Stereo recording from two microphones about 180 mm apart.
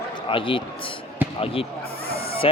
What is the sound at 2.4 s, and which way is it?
Speech, 30° left (ahead or behind).